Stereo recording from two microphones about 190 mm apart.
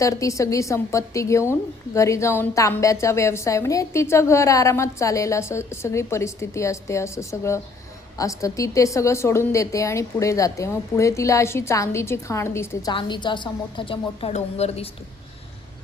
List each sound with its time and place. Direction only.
0.0 s a woman's voice: 15° left (ahead or behind); by 14.8 s 35° left (ahead or behind)